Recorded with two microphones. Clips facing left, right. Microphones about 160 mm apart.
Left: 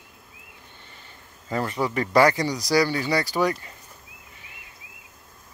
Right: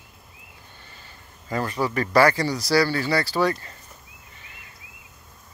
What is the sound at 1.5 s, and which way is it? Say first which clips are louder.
Speech: even; 25° left (ahead or behind).